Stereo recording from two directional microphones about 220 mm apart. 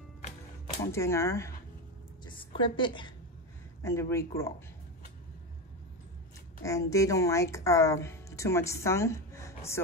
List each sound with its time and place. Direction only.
0.9 s a woman's voice: 15° left (ahead or behind)
2.2 s a sound: 25° left (ahead or behind)
3.8 s a woman's voice: 10° left (ahead or behind)
6.6 s a woman's voice: 15° left (ahead or behind)